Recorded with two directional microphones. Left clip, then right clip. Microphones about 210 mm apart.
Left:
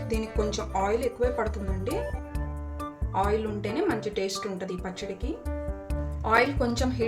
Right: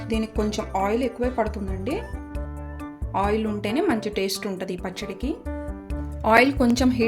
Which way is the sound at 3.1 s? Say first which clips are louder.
Right 3 dB; 45° right (ahead or behind).